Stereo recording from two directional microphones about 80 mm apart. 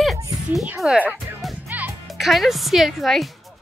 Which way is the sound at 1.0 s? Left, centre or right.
Right.